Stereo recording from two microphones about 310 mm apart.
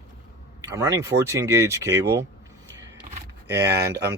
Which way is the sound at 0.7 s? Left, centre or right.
Centre.